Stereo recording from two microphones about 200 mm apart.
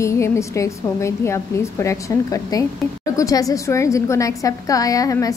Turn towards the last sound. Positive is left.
turn(degrees=15)  # may be behind; listen again after turning